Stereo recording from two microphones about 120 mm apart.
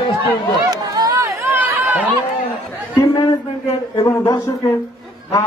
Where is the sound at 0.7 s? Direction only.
30° right (ahead or behind).